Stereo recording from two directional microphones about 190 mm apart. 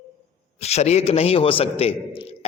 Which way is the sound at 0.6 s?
35° left (ahead or behind).